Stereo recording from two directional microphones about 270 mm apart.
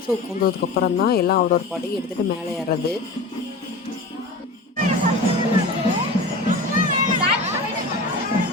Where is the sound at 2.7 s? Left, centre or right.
Left.